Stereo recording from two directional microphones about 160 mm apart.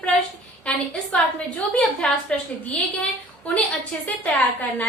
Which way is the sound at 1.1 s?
10° left (ahead or behind).